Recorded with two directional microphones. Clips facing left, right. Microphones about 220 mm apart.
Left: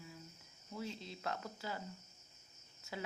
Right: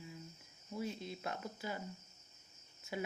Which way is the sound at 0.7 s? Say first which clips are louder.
Right 3 dB; 15° right (ahead or behind).